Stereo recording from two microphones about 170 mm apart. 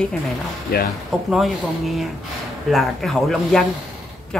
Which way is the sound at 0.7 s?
65° left (ahead or behind).